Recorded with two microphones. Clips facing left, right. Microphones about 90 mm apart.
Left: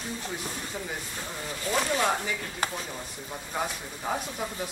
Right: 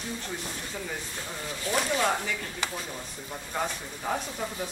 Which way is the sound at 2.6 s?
45° left (ahead or behind).